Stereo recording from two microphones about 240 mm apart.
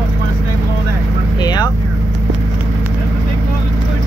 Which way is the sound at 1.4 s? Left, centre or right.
Centre.